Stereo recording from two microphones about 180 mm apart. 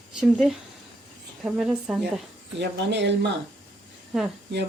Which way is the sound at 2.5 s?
75° right (ahead or behind).